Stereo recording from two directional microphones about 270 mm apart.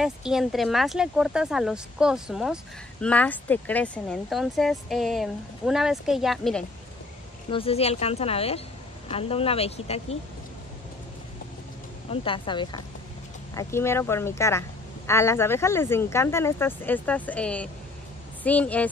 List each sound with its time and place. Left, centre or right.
0.0 s speech: centre
7.5 s speech: left
12.1 s speech: centre